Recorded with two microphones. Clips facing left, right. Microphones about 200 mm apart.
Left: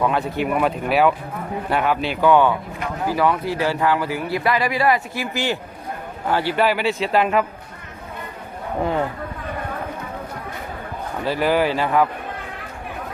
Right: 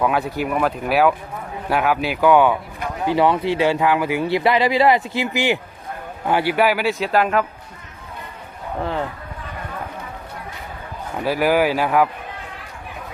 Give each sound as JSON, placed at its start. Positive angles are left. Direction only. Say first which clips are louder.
{"t": 0.0, "sound": "speech", "louder": "even", "side_deg": -5}
{"t": 3.1, "sound": "speech", "louder": "right 3 dB", "side_deg": -25}
{"t": 8.8, "sound": "speech", "louder": "left 3 dB", "side_deg": 10}
{"t": 11.3, "sound": "speech", "louder": "right 2 dB", "side_deg": -10}